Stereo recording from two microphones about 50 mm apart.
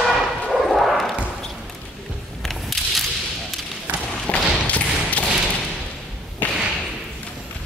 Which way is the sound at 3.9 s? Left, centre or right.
Right.